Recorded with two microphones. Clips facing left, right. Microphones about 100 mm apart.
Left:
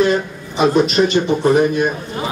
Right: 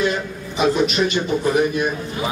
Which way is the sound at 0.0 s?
45° left (ahead or behind).